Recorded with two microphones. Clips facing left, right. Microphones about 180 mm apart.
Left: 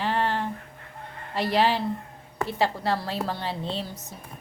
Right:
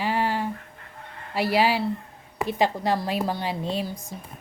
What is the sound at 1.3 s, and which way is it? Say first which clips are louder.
A woman's voice: right 1 dB; 10° right (ahead or behind).